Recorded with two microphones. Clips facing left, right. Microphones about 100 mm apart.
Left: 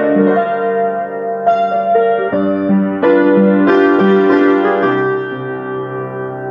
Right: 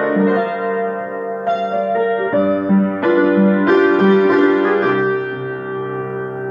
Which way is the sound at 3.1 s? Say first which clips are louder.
Left 3 dB; 15° right (ahead or behind).